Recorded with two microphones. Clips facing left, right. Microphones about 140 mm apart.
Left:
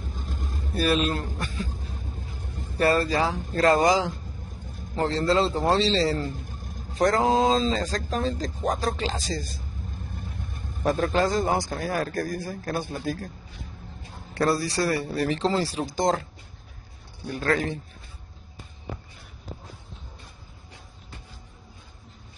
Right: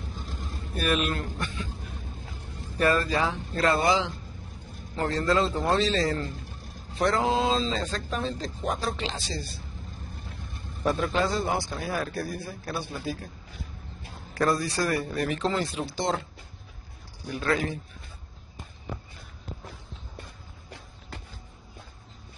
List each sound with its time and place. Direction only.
0.3 s vehicle: 40° left (ahead or behind)
1.4 s speech: 40° left (ahead or behind)
2.8 s speech: 35° left (ahead or behind)
14.3 s speech: 30° left (ahead or behind)
17.3 s speech: 40° left (ahead or behind)